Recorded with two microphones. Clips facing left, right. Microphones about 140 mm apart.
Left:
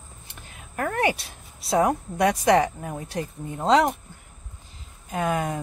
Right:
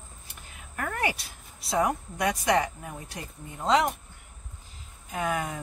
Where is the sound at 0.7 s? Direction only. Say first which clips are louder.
Left 6 dB; 30° left (ahead or behind).